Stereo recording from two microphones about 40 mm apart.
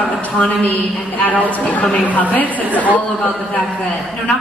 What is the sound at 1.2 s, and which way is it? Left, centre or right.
A woman's voice, left.